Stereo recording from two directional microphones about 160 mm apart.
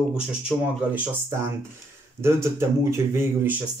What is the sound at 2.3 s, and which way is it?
Speech, 15° right (ahead or behind).